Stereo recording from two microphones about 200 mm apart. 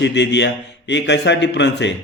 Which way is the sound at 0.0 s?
60° left (ahead or behind).